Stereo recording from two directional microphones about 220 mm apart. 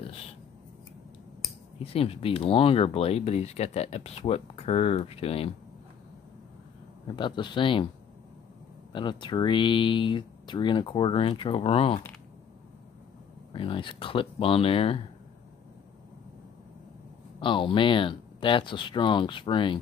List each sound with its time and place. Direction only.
2.0 s speech: 25° left (ahead or behind)
7.1 s speech: 20° left (ahead or behind)
8.9 s speech: 20° left (ahead or behind)
13.5 s speech: 25° left (ahead or behind)
17.4 s speech: 20° left (ahead or behind)